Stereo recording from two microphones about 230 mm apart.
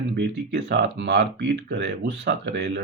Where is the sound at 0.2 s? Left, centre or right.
Right.